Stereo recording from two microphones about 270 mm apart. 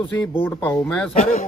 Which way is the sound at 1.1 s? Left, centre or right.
Left.